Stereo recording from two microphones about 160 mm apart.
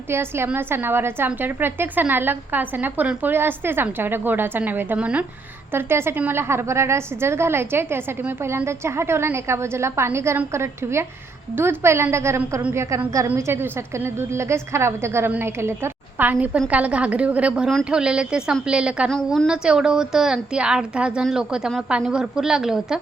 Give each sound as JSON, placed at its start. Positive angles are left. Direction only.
{"t": 0.1, "sound": "a woman's voice", "side_deg": -15}